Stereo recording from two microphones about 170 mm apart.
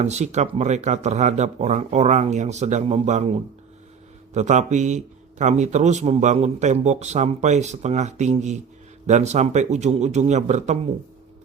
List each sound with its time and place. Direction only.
0.0 s speech: 40° right (ahead or behind)
4.4 s speech: 45° right (ahead or behind)